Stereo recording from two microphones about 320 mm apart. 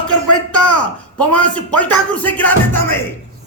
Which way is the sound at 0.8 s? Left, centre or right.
Centre.